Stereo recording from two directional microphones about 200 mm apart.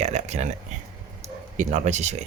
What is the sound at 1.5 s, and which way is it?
Speech, 35° right (ahead or behind).